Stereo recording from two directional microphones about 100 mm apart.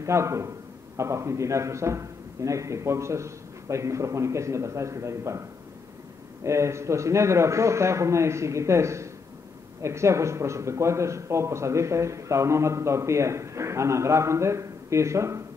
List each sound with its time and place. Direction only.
0.0 s speech: 30° right (ahead or behind)
6.4 s speech: 30° right (ahead or behind)